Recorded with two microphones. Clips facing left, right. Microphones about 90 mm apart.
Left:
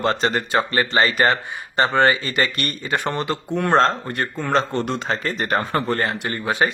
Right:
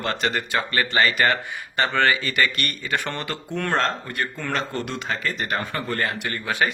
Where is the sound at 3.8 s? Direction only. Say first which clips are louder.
Left 5 dB; 35° left (ahead or behind).